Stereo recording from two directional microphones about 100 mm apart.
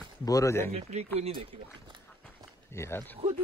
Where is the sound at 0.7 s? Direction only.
90° right.